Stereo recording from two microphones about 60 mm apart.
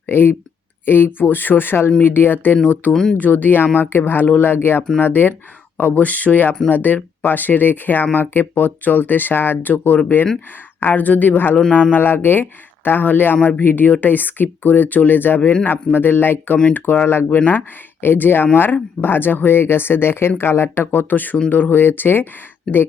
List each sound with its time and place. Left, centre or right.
0.1 s speech: left
2.9 s speech: centre
3.2 s speech: left